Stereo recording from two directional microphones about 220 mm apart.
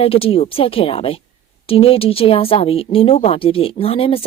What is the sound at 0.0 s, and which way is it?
A woman's voice, 25° left (ahead or behind).